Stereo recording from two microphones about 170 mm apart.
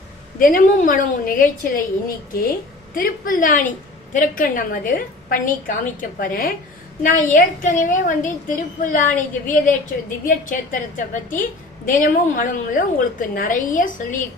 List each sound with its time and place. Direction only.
0.3 s a woman's voice: 55° left (ahead or behind)
2.9 s a woman's voice: 55° left (ahead or behind)